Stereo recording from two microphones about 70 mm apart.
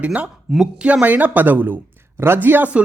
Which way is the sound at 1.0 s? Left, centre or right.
Right.